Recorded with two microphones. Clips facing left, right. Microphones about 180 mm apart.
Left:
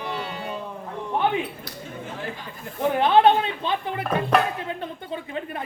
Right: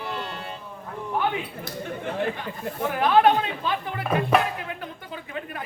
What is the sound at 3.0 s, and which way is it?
A woman's voice, 25° left (ahead or behind).